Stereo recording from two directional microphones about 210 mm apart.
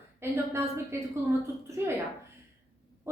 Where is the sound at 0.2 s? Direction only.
10° right (ahead or behind).